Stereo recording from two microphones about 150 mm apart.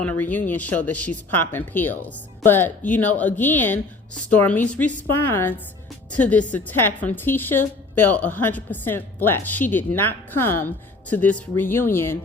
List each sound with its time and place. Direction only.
0.0 s speech: 10° left (ahead or behind)